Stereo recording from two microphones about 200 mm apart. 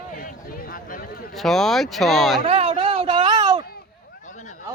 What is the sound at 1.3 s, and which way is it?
Speech, centre (ahead or behind).